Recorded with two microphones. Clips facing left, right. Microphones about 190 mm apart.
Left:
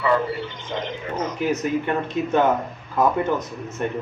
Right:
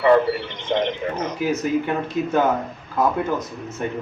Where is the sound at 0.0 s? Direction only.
65° right (ahead or behind).